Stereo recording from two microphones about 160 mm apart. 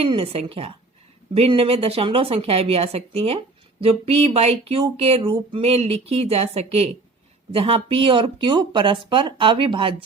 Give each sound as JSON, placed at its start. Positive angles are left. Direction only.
{"t": 0.0, "sound": "speech", "side_deg": -35}